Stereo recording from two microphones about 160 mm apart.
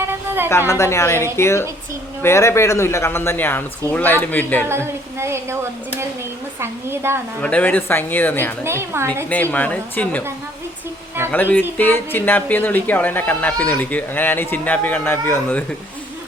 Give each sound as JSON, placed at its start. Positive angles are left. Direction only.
{"t": 0.0, "sound": "a sound", "side_deg": -15}
{"t": 0.7, "sound": "speech", "side_deg": 15}
{"t": 5.2, "sound": "speech", "side_deg": -15}
{"t": 7.4, "sound": "speech", "side_deg": 10}
{"t": 8.6, "sound": "speech", "side_deg": -15}
{"t": 9.3, "sound": "speech", "side_deg": 10}
{"t": 11.3, "sound": "speech", "side_deg": 10}